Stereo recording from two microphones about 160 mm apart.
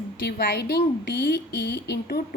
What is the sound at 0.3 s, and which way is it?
A woman's voice, 85° left.